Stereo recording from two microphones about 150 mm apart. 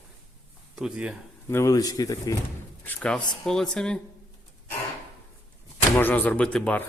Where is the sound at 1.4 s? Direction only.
20° left (ahead or behind).